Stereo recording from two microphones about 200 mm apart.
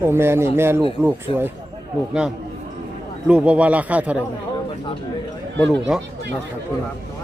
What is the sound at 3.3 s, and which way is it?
Speech, 5° right (ahead or behind).